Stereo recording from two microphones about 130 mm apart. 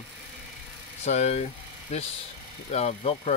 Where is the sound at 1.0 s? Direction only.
60° left (ahead or behind).